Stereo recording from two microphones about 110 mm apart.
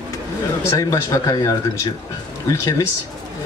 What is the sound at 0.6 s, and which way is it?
A man's voice, 30° left (ahead or behind).